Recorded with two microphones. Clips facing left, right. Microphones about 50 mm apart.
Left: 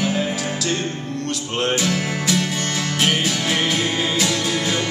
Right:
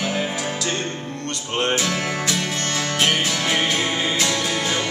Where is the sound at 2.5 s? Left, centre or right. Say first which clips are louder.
Left 1 dB; centre.